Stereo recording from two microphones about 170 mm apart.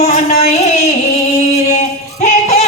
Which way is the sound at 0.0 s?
40° left (ahead or behind).